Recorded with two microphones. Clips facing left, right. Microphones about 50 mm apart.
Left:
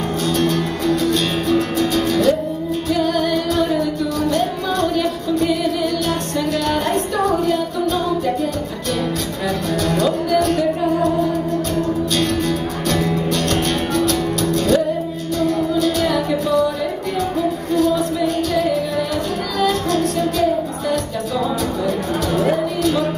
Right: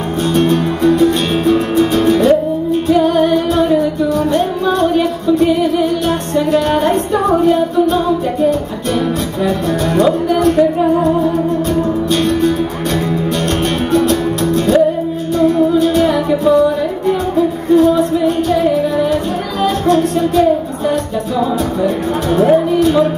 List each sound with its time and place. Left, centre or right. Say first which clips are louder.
0.3 s music: right 7 dB; right
9.8 s music: right 6 dB; right
12.2 s music: right 6 dB; right
17.6 s music: right 8 dB; right
22.5 s music: right 7 dB; right